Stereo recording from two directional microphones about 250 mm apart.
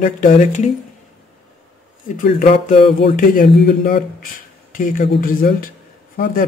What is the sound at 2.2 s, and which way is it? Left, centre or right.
Speech, left.